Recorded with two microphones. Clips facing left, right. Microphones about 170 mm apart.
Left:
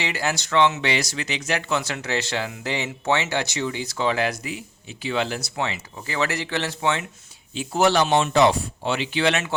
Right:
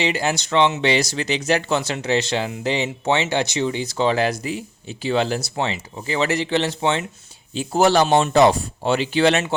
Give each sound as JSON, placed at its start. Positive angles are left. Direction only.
{"t": 0.0, "sound": "speech", "side_deg": -20}
{"t": 7.5, "sound": "speech", "side_deg": -35}